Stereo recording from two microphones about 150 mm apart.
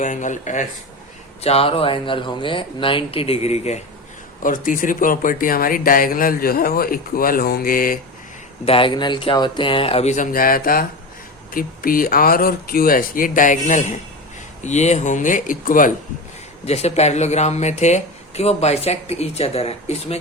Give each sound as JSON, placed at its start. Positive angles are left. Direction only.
{"t": 0.0, "sound": "speech", "side_deg": 55}
{"t": 1.4, "sound": "speech", "side_deg": 45}
{"t": 4.4, "sound": "speech", "side_deg": 60}
{"t": 8.6, "sound": "speech", "side_deg": 35}
{"t": 10.3, "sound": "speech", "side_deg": 75}
{"t": 16.6, "sound": "speech", "side_deg": 45}